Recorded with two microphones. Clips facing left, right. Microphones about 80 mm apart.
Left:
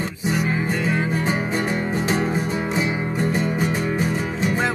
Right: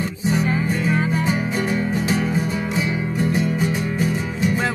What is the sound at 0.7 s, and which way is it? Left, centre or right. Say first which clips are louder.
Music: right 1 dB; left.